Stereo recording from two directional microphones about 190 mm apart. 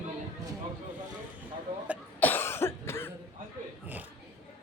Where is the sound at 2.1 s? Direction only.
10° left (ahead or behind).